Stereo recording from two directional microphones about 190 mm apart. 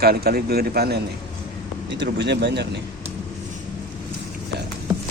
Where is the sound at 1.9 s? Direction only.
70° right (ahead or behind).